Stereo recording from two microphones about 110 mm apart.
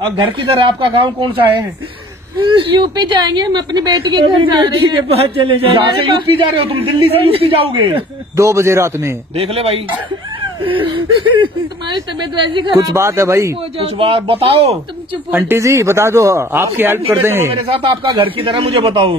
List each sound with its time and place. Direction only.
0.0 s a woman's voice: 55° right (ahead or behind)
5.1 s a man's voice: 60° right (ahead or behind)
8.4 s a man's voice: 25° right (ahead or behind)
9.4 s a man's voice: 60° right (ahead or behind)
10.6 s a woman's voice: 50° right (ahead or behind)
12.9 s a man's voice: 25° right (ahead or behind)
13.7 s a man's voice: 55° right (ahead or behind)
15.3 s a man's voice: 20° right (ahead or behind)
17.7 s a woman's voice: 55° right (ahead or behind)